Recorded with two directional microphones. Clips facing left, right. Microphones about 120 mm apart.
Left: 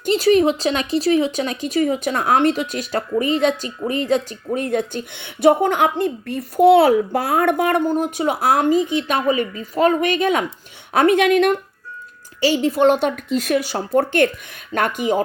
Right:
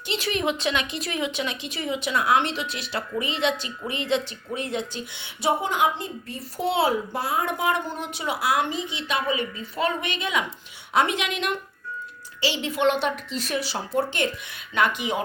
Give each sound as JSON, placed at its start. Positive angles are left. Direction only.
{"t": 0.0, "sound": "speech", "side_deg": 40}
{"t": 14.7, "sound": "speech", "side_deg": 45}